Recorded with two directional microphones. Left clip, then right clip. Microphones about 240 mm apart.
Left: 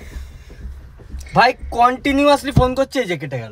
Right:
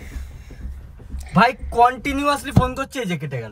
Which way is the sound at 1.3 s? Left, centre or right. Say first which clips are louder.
Left 2 dB; left.